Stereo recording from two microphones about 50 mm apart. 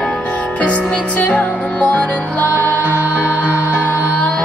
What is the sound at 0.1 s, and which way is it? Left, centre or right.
Music, left.